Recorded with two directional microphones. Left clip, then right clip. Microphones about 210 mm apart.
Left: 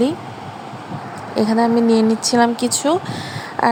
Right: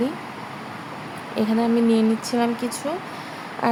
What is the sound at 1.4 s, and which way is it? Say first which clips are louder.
Speech: left 6 dB; 25° left (ahead or behind).